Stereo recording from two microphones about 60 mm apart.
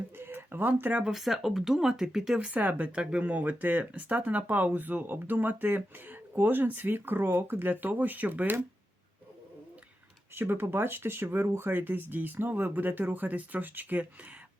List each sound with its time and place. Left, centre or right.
0.2 s a sound: right
1.0 s speech: centre
2.4 s speech: right
10.3 s speech: right